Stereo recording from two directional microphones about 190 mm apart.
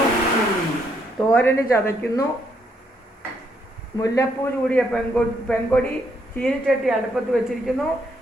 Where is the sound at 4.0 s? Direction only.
20° left (ahead or behind).